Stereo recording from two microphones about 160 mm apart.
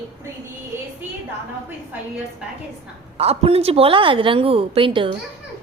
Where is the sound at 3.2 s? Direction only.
40° right (ahead or behind).